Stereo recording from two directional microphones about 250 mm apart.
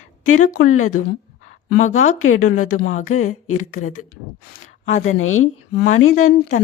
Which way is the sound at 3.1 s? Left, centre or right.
Left.